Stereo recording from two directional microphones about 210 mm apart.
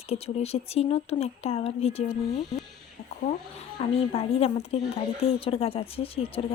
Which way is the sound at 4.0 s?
30° left (ahead or behind).